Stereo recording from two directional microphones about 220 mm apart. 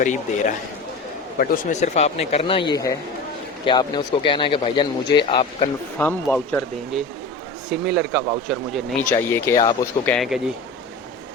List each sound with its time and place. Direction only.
0.0 s a man's voice: 35° left (ahead or behind)
6.0 s speech: 5° left (ahead or behind)
9.1 s speech: 10° left (ahead or behind)
10.1 s speech: centre (ahead or behind)